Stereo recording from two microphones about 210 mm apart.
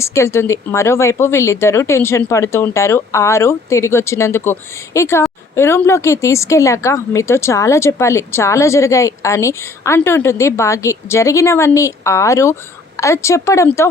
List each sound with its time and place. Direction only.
0.0 s a woman's voice: 15° left (ahead or behind)